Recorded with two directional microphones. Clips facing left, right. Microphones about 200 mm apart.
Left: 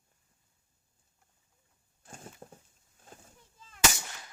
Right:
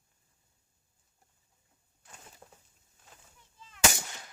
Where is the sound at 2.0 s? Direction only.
45° left (ahead or behind).